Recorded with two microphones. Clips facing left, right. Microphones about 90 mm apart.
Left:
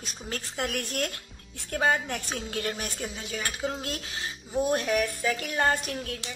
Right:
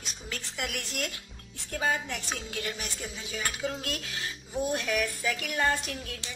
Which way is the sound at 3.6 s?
30° left (ahead or behind).